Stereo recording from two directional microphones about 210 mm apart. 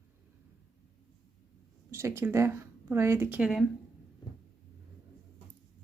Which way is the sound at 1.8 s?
10° right (ahead or behind).